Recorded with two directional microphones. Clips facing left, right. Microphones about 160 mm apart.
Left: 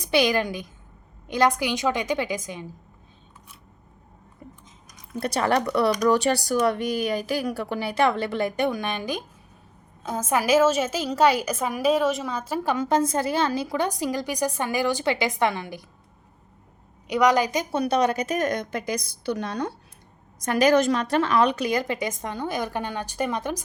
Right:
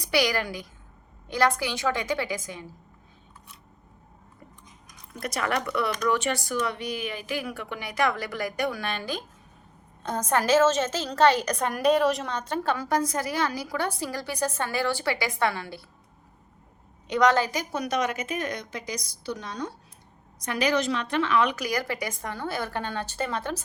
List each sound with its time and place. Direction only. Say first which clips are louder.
0.0 s a woman's voice: left 4 dB; 20° left (ahead or behind)
5.2 s a woman's voice: left 5 dB; 30° left (ahead or behind); by 12.7 s 10° left (ahead or behind)
12.7 s a woman's voice: left 6 dB; 20° left (ahead or behind)
17.1 s a woman's voice: left 2 dB; 10° left (ahead or behind); by 19.7 s 60° left (ahead or behind)
20.4 s a woman's voice: left 6 dB; 45° left (ahead or behind); by 23.6 s 15° left (ahead or behind)